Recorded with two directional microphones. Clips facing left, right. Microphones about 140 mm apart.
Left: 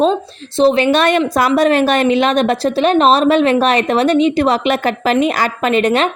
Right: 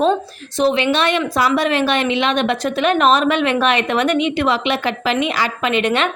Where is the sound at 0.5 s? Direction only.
30° left (ahead or behind).